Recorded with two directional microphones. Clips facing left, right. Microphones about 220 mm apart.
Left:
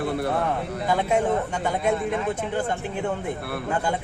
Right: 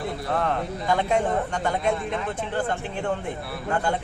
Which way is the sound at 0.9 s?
5° left (ahead or behind).